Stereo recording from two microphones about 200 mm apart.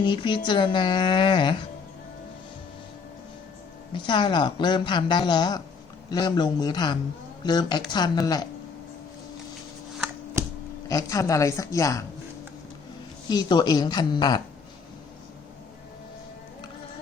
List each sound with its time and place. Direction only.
0.0 s speech: 25° left (ahead or behind)
3.9 s speech: 20° left (ahead or behind)
10.8 s a woman's voice: 15° left (ahead or behind)
13.2 s speech: 20° left (ahead or behind)